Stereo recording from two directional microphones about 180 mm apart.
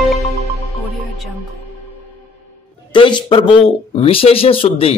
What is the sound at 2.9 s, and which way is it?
A man's voice, 30° left (ahead or behind).